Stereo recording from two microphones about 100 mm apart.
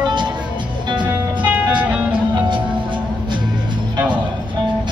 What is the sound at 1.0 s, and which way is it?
Music, 15° right (ahead or behind).